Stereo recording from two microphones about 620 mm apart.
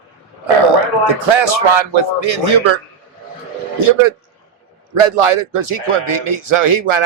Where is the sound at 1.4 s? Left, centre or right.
Right.